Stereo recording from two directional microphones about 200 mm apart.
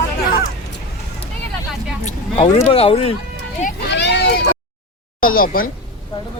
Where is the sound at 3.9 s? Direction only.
60° left (ahead or behind).